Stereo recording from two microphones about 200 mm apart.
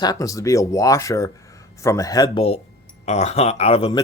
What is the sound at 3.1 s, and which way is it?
Keys jangling, 35° left (ahead or behind).